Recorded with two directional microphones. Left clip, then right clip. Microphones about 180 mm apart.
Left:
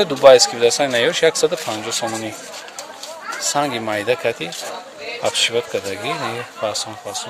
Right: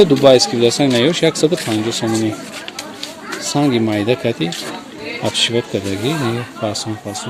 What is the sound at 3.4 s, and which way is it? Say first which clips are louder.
Speech: right 4 dB; centre (ahead or behind).